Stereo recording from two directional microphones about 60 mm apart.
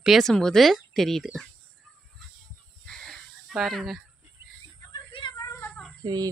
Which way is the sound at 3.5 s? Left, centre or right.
Centre.